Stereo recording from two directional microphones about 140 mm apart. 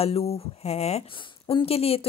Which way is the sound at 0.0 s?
45° left (ahead or behind).